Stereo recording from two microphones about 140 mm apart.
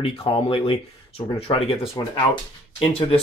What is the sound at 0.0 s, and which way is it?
Speech, 45° left (ahead or behind).